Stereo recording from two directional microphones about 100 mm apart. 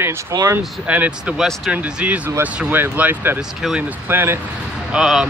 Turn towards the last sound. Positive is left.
turn(degrees=-5)  # may be behind; listen again after turning